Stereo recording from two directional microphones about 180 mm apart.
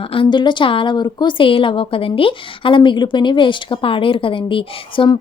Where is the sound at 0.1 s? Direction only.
25° left (ahead or behind).